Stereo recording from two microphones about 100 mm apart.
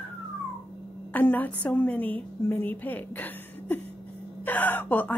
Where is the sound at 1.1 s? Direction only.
20° left (ahead or behind).